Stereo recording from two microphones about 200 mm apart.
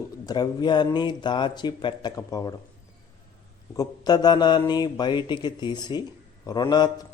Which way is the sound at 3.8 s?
20° left (ahead or behind).